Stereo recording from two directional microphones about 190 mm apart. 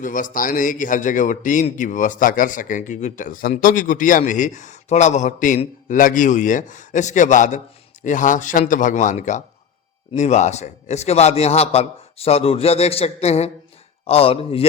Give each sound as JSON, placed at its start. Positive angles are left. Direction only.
{"t": 0.0, "sound": "a man's voice", "side_deg": 45}